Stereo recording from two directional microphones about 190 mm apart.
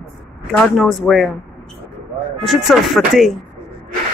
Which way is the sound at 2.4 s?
Centre (ahead or behind).